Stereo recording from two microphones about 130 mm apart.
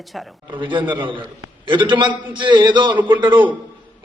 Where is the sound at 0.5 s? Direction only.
40° right (ahead or behind).